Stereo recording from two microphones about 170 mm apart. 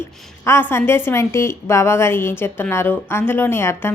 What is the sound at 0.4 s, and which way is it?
A woman's voice, 15° left (ahead or behind).